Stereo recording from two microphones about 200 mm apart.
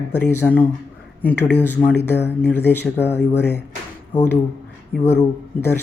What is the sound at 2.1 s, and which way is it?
Speech, 55° left (ahead or behind).